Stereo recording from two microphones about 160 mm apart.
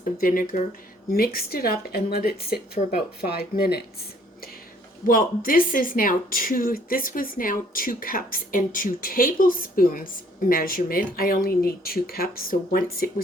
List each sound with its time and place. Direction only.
0.2 s a woman's voice: 60° left (ahead or behind); by 3.8 s 75° left (ahead or behind)
5.0 s speech: 60° left (ahead or behind)